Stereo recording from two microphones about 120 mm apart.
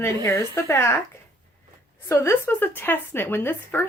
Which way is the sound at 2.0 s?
25° left (ahead or behind).